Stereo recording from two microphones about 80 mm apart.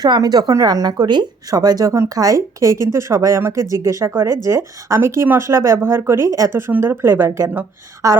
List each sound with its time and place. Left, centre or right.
0.0 s speech: right
1.5 s speech: right